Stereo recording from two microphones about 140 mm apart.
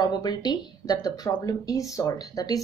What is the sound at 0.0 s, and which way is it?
Speech, 30° left (ahead or behind).